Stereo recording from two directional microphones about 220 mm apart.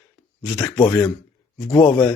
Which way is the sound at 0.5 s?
15° left (ahead or behind).